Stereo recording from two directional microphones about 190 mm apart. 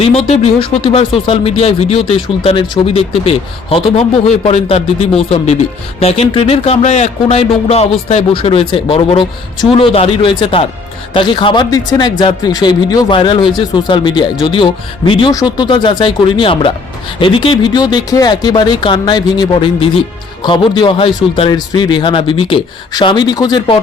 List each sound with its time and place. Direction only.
0.3 s speech: 30° left (ahead or behind)